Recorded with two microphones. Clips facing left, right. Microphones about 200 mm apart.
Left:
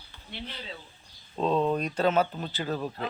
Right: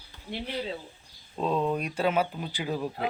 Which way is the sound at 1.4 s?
5° right (ahead or behind).